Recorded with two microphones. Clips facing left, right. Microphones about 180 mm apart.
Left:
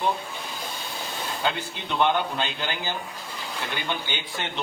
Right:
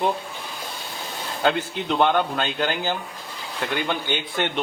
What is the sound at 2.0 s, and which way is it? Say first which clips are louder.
Speech: right 2 dB; 55° right (ahead or behind).